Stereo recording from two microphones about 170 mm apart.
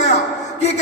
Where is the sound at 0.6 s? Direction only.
40° left (ahead or behind).